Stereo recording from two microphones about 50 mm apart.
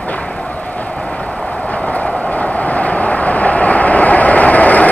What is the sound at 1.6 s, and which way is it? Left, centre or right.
Vehicle, left.